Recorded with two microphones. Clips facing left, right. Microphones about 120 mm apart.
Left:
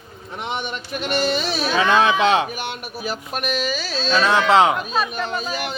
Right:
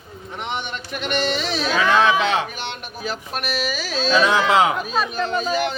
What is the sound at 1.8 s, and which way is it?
Speech, 20° left (ahead or behind).